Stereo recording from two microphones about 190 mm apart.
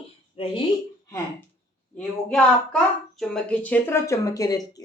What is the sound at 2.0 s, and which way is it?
A child's voice, 5° left (ahead or behind).